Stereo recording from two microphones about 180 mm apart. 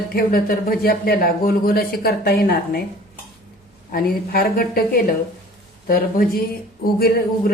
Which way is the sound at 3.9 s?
55° left (ahead or behind).